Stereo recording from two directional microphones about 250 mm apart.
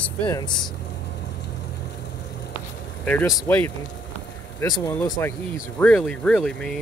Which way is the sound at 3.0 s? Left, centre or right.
Centre.